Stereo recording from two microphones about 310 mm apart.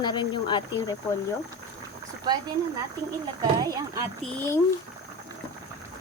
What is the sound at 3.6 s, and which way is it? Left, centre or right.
Speech, centre.